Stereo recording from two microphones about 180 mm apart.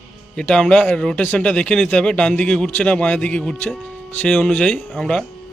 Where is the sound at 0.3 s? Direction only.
5° left (ahead or behind).